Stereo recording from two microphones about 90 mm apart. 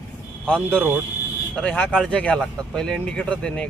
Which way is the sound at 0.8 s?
20° right (ahead or behind).